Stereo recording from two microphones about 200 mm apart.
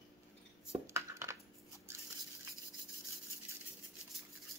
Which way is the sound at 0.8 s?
15° right (ahead or behind).